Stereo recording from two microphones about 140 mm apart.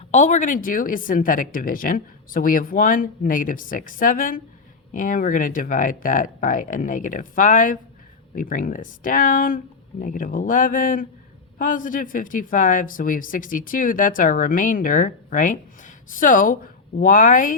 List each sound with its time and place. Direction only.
0.1 s speech: 60° left (ahead or behind)
8.4 s speech: 85° left